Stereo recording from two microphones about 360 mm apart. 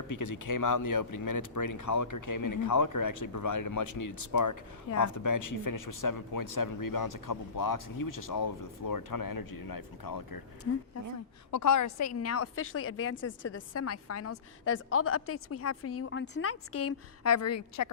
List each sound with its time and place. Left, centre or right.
0.1 s speech: left
11.5 s a woman's voice: left